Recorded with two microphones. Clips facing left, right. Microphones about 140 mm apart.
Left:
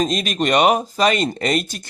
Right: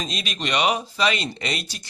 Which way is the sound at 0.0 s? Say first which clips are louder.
Left 10 dB; 45° left (ahead or behind).